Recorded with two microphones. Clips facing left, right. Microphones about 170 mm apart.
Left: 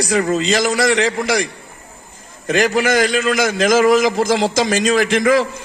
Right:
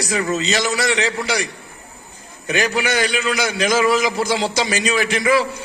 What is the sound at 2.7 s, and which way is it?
A man's voice, 45° left (ahead or behind).